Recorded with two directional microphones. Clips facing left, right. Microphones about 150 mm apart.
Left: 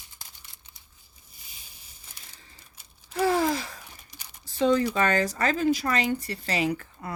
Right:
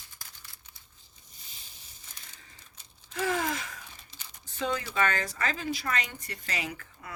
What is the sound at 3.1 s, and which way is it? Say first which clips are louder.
Speech: left 7 dB; 35° left (ahead or behind).